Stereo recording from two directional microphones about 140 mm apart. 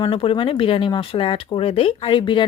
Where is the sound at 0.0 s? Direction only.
40° left (ahead or behind).